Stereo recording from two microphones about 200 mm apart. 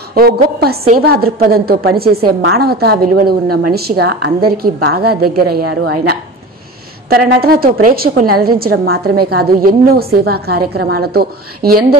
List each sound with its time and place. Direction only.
0.1 s a woman's voice: 50° right (ahead or behind)